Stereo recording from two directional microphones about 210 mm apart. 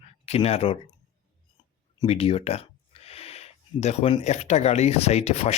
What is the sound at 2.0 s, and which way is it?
Speech, 30° left (ahead or behind).